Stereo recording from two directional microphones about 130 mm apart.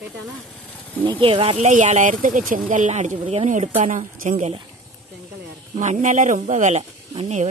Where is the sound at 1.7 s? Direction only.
70° right (ahead or behind).